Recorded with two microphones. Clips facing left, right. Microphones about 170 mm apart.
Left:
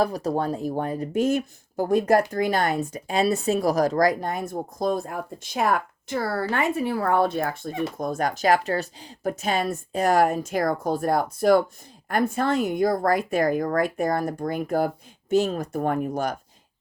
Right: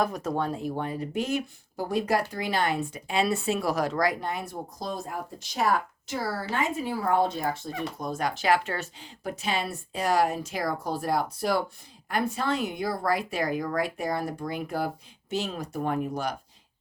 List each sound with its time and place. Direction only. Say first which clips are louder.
0.0 s speech: left 4 dB; 35° left (ahead or behind)